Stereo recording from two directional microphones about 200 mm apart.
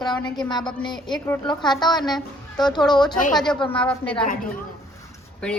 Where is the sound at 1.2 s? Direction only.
10° left (ahead or behind).